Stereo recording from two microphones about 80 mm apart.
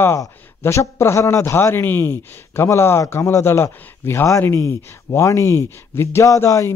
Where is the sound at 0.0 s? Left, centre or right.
Left.